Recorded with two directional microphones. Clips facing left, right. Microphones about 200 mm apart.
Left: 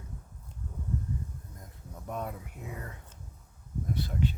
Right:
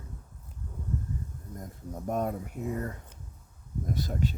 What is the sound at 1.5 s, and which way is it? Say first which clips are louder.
Speech: right 9 dB; 45° right (ahead or behind).